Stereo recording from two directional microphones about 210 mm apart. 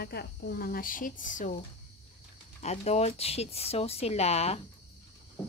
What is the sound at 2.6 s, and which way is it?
Speech, 30° left (ahead or behind).